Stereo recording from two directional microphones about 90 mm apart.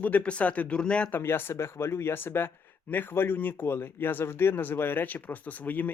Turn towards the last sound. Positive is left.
turn(degrees=20)  # may be behind; listen again after turning